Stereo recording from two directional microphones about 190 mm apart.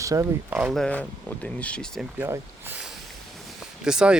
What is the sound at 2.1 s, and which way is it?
Speech, 10° right (ahead or behind).